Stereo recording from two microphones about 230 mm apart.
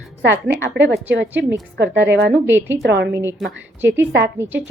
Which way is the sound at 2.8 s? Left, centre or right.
Right.